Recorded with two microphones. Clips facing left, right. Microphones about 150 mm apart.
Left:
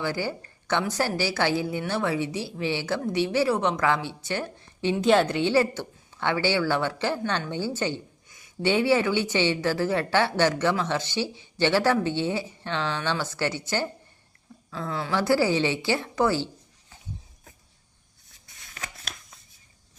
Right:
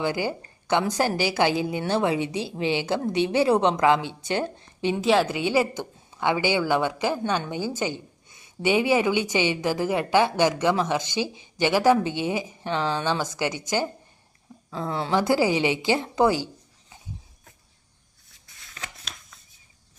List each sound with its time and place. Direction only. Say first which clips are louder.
0.0 s a woman's voice: right 3 dB; 15° right (ahead or behind)
4.9 s a woman's voice: left 1 dB; 5° right (ahead or behind)
8.3 s a sound: right 1 dB; 25° right (ahead or behind)
8.6 s a woman's voice: right 1 dB; 15° right (ahead or behind)